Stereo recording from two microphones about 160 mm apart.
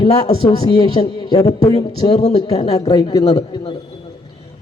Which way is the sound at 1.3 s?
20° left (ahead or behind).